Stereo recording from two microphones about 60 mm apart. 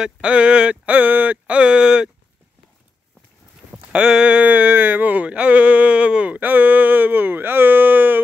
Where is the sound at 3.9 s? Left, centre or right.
Centre; by 8.2 s right.